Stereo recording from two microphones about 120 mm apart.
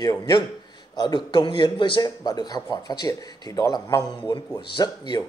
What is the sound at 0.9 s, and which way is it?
Speech, 35° left (ahead or behind).